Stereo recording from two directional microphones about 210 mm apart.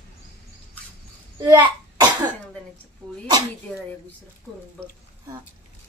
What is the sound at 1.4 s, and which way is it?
Speech, 20° right (ahead or behind).